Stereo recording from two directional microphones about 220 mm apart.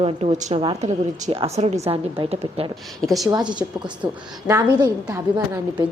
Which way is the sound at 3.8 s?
10° right (ahead or behind).